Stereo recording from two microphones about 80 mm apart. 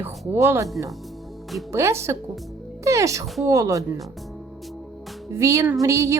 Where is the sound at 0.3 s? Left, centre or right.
Right.